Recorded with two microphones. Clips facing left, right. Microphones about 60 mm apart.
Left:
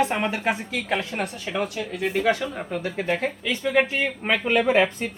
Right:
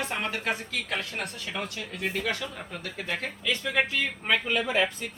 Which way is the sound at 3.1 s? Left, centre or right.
Centre.